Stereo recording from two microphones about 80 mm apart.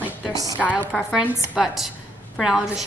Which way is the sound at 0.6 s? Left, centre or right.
Centre.